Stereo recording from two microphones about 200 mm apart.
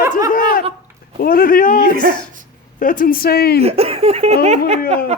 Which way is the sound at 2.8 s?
45° left (ahead or behind).